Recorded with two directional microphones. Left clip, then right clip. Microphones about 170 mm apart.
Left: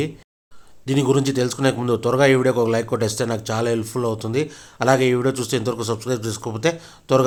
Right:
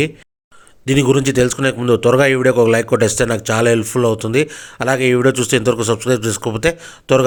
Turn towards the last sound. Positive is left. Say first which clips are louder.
# right 4 dB
turn(degrees=-25)  # may be behind; listen again after turning